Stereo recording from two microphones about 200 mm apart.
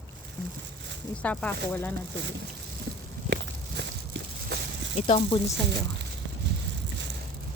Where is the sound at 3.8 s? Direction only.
60° right (ahead or behind).